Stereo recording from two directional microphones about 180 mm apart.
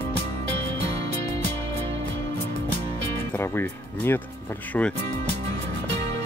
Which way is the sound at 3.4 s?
10° left (ahead or behind).